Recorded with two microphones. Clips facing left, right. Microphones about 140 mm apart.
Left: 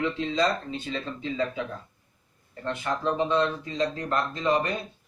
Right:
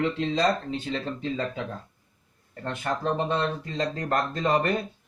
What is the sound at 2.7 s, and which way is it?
Speech, 45° right (ahead or behind).